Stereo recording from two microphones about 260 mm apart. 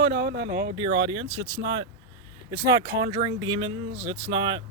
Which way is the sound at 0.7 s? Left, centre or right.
Centre.